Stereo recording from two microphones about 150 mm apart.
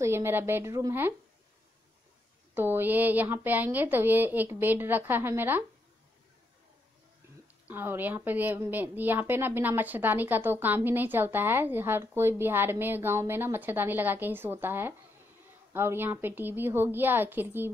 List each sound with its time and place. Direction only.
0.0 s a woman's voice: 15° right (ahead or behind)
2.5 s a woman's voice: 15° right (ahead or behind)
7.6 s a woman's voice: 15° right (ahead or behind)